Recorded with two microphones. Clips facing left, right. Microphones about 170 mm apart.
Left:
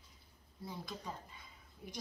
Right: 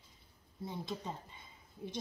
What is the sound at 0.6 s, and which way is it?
Speech, 25° right (ahead or behind).